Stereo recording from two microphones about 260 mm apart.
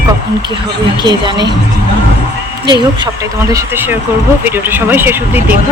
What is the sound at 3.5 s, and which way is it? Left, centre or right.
Speech, centre.